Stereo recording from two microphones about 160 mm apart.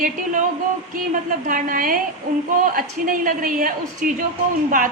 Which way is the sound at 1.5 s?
55° right (ahead or behind).